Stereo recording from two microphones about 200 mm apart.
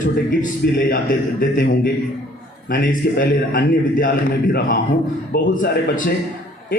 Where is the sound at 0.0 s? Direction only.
45° left (ahead or behind).